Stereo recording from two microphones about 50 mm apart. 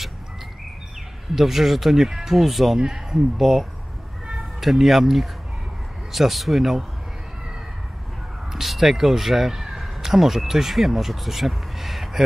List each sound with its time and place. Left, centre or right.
1.3 s speech: centre
2.8 s speech: centre
8.5 s speech: centre